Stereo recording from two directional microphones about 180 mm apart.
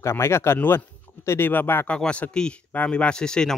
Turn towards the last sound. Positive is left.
turn(degrees=5)  # may be behind; listen again after turning